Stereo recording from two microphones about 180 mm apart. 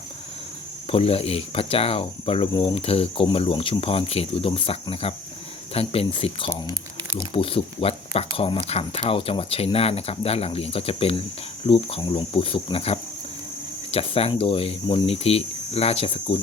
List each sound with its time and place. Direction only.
0.9 s cricket: 35° left (ahead or behind)